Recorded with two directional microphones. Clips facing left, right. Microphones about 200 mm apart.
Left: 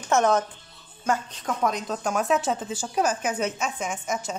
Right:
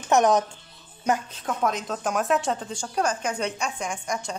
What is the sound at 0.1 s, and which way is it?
Speech, 15° right (ahead or behind).